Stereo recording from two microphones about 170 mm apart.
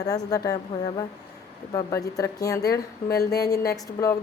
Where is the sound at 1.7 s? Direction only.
20° left (ahead or behind).